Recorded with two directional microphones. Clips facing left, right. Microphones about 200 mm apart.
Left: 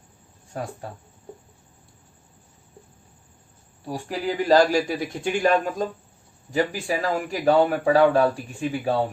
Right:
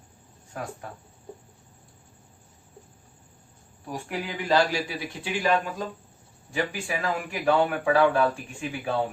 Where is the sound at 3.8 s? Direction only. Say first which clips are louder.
Left 5 dB; 35° left (ahead or behind).